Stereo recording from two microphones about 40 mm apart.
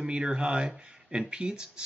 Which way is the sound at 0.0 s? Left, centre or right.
Centre.